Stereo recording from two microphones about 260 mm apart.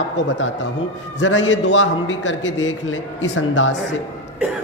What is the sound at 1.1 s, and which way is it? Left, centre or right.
A man's voice, left.